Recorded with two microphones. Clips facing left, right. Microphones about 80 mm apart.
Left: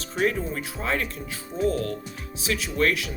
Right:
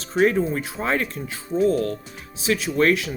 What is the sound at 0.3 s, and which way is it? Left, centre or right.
Speech, right.